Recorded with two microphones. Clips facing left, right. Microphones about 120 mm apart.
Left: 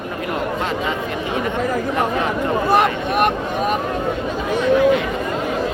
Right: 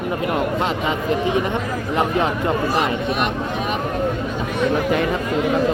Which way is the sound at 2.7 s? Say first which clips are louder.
Left 3 dB; 55° left (ahead or behind).